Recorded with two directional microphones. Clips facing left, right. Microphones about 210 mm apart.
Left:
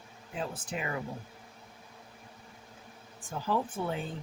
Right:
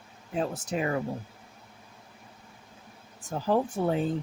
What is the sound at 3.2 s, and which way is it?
Speech, 40° right (ahead or behind).